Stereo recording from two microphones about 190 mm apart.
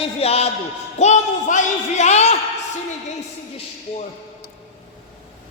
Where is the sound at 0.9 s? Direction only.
35° left (ahead or behind).